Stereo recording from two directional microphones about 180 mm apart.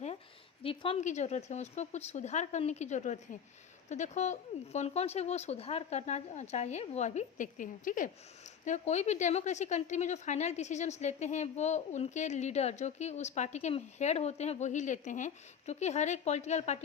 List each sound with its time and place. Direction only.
0.6 s a woman's voice: 30° left (ahead or behind)